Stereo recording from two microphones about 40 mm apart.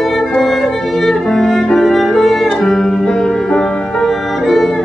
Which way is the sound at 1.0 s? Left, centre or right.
Centre.